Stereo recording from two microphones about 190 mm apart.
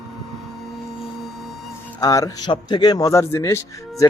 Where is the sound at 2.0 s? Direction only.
20° left (ahead or behind).